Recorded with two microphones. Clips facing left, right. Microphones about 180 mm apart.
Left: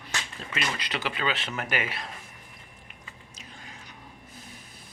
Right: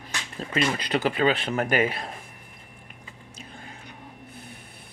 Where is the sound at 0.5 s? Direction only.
50° right (ahead or behind).